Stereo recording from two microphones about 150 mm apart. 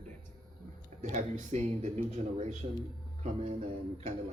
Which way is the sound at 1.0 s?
55° right (ahead or behind).